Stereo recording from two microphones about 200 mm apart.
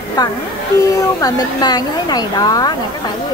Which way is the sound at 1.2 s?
20° left (ahead or behind).